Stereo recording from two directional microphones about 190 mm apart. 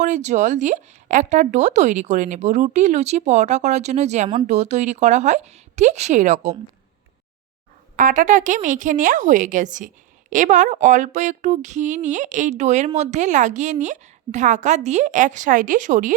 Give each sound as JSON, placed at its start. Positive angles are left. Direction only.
{"t": 0.0, "sound": "a woman's voice", "side_deg": -40}
{"t": 7.9, "sound": "a woman's voice", "side_deg": -45}